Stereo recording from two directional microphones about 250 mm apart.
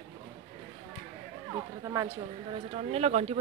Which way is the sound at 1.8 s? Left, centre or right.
Centre.